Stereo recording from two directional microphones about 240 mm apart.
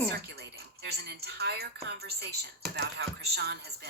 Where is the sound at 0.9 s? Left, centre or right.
Right.